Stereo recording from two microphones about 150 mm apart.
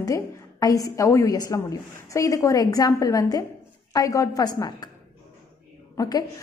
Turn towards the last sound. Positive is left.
turn(degrees=25)  # may be behind; listen again after turning